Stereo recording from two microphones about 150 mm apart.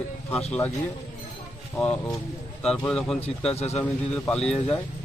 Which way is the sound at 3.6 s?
45° left (ahead or behind).